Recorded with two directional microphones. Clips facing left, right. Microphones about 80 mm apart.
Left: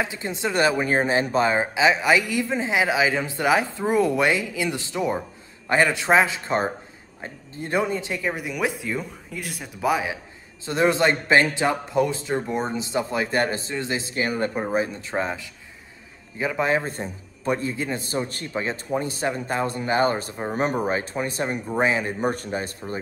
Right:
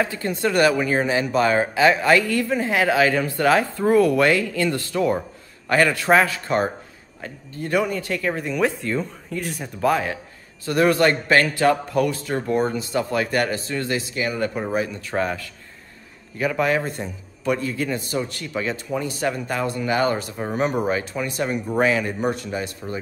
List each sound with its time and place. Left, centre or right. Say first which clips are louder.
0.0 s a man's voice: right 4 dB; centre
0.8 s a man's voice: even; left; by 10.1 s centre
10.6 s a man's voice: right 3 dB; left
14.0 s a man's voice: even; left
22.3 s speech: right 1 dB; left